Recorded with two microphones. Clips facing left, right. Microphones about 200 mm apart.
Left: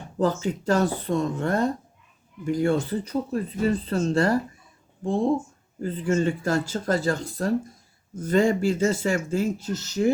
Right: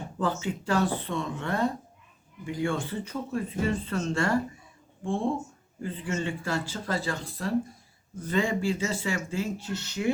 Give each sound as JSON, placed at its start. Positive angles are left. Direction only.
{"t": 0.2, "sound": "speech", "side_deg": 40}